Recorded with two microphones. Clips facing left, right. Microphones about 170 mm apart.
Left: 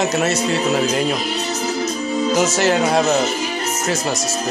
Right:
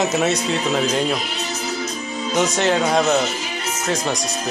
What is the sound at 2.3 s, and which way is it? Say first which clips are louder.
Speech: even; 5° left (ahead or behind).